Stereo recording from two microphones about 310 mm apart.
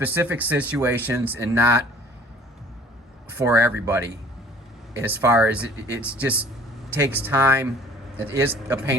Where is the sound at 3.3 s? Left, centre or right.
Centre.